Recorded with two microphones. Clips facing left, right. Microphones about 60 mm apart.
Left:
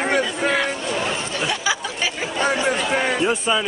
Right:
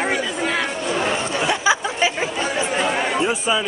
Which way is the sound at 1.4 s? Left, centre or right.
Right.